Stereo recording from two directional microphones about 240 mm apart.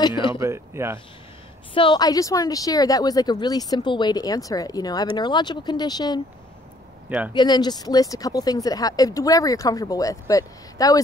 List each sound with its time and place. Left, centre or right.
0.0 s speech: centre
0.4 s speech: centre
1.7 s speech: left
7.3 s speech: centre